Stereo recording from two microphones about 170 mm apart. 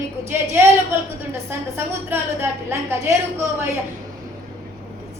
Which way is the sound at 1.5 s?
15° right (ahead or behind).